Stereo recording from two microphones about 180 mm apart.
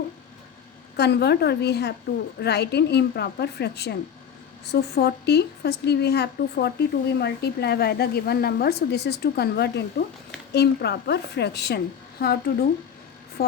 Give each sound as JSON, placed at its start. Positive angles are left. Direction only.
{"t": 0.9, "sound": "a woman's voice", "side_deg": 65}